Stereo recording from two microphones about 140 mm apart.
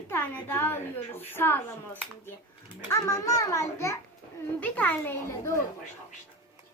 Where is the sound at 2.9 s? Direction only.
20° left (ahead or behind).